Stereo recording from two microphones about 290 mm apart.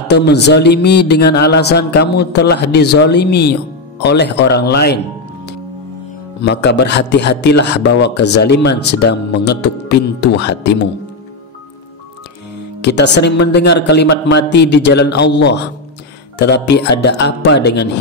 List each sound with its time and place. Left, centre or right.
0.1 s a man's voice: left
12.8 s a man's voice: left